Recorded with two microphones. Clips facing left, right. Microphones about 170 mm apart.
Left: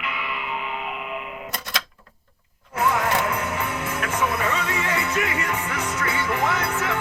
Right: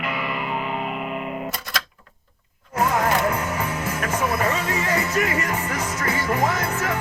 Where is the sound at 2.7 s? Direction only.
40° right (ahead or behind).